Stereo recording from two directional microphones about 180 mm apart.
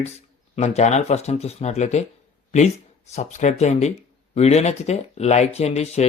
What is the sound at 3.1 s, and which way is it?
Speech, 40° left (ahead or behind).